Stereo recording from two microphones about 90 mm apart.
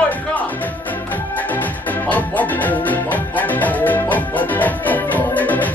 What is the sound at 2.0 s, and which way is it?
Music, 20° left (ahead or behind).